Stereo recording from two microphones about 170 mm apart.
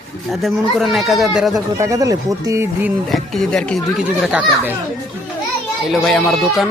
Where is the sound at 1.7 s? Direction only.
20° right (ahead or behind).